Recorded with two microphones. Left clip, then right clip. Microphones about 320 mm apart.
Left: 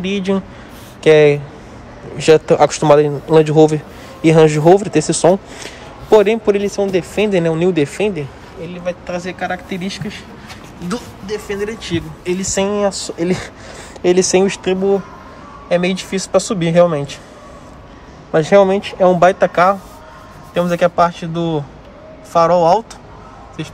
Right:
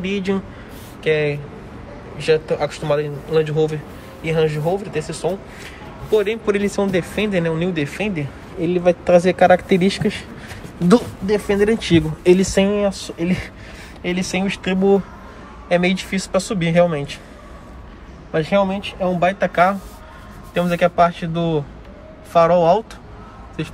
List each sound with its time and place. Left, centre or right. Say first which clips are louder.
0.0 s a man's voice: left 4 dB; centre
6.1 s a man's voice: left 7 dB; centre
8.6 s speech: right 8 dB; centre
12.5 s a man's voice: left 2 dB; centre
18.3 s a man's voice: left 7 dB; centre